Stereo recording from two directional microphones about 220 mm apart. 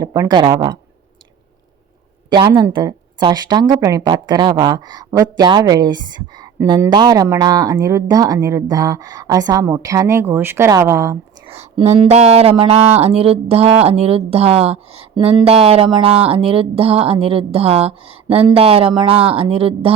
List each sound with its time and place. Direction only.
0.0 s speech: 15° right (ahead or behind)
2.3 s speech: 15° right (ahead or behind)
11.5 s speech: 30° right (ahead or behind)